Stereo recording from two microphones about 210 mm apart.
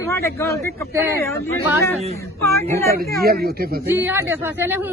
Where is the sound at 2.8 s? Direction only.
45° right (ahead or behind).